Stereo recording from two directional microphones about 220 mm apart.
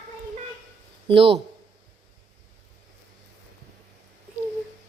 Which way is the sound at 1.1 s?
25° right (ahead or behind).